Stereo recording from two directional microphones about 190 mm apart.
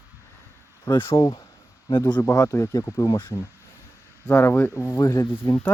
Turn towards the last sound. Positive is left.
turn(degrees=15)  # may be behind; listen again after turning